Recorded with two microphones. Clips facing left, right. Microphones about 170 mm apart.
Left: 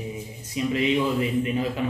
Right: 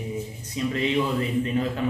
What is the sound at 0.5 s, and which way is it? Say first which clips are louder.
Speech: left 1 dB; 15° left (ahead or behind).